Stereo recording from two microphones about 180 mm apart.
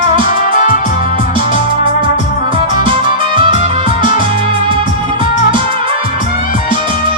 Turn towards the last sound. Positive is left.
turn(degrees=-30)  # may be behind; listen again after turning